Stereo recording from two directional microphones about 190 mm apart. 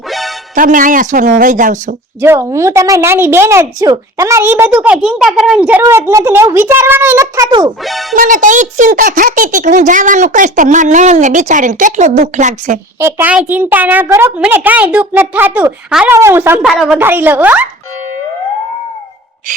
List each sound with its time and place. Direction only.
0.1 s music: centre (ahead or behind)
0.5 s speech: 45° right (ahead or behind)
2.2 s a woman's voice: 15° right (ahead or behind)
8.1 s a child's voice: 45° right (ahead or behind)
13.0 s a woman's voice: 10° right (ahead or behind)
16.6 s a woman's voice: centre (ahead or behind)
17.0 s a woman's voice: 10° right (ahead or behind)